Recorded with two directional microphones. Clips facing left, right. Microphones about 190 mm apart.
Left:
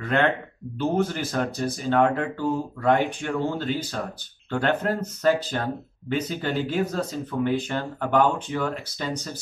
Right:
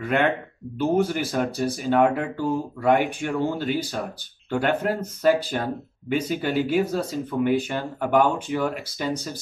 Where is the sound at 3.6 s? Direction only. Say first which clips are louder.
Right 2 dB; 15° right (ahead or behind).